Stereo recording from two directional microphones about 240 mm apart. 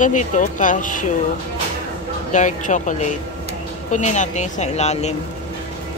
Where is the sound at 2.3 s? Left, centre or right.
Left.